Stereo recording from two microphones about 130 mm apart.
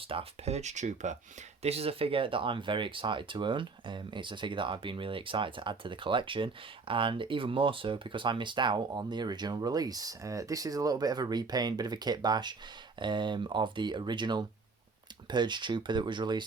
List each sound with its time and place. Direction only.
0.0 s speech: 45° right (ahead or behind); by 1.1 s 65° right (ahead or behind)
1.6 s speech: 50° right (ahead or behind); by 16.5 s 35° right (ahead or behind)